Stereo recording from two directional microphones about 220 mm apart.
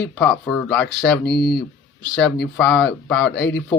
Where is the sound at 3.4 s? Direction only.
50° left (ahead or behind).